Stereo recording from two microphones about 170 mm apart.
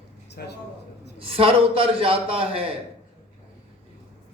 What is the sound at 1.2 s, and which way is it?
Speech, 35° right (ahead or behind).